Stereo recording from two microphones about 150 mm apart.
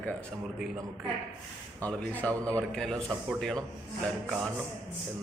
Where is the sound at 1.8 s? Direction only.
10° left (ahead or behind).